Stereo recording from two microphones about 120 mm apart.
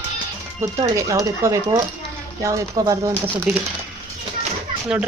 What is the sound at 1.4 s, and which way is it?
Speech, 25° right (ahead or behind).